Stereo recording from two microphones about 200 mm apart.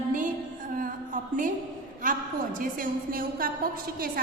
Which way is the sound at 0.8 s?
45° right (ahead or behind).